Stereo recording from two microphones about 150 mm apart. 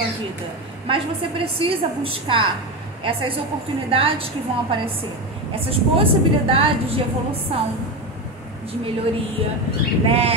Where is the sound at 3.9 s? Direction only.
40° right (ahead or behind).